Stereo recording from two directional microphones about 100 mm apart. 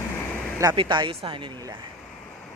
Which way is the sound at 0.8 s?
55° right (ahead or behind).